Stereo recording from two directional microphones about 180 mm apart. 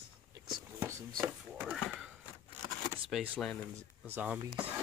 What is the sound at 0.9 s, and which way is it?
Speech, 15° right (ahead or behind).